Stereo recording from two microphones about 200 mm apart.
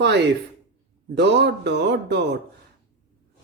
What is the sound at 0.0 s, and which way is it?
A man's voice, 60° right (ahead or behind).